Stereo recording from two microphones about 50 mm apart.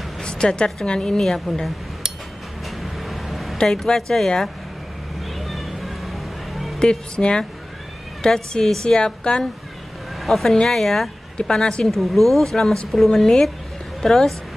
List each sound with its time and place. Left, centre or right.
0.2 s a sound: centre
0.8 s speech: centre
2.8 s vehicle: centre
3.5 s speech: centre
5.4 s music: centre
6.8 s speech: centre
10.2 s speech: centre